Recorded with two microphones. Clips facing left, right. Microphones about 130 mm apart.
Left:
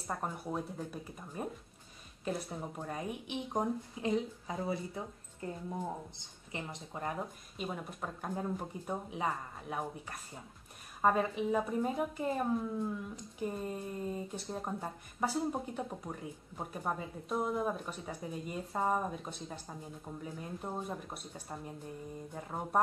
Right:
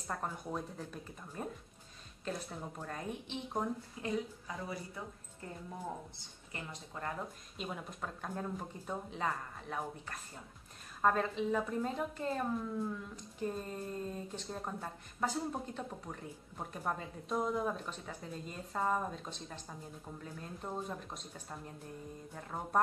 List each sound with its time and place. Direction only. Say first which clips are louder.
0.0 s speech: left 2 dB; 10° left (ahead or behind); by 5.0 s 25° left (ahead or behind)
6.1 s speech: left 4 dB; 20° left (ahead or behind)
7.5 s speech: left 3 dB; 5° left (ahead or behind)